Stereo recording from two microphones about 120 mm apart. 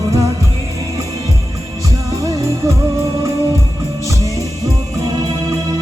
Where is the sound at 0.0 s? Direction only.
25° right (ahead or behind).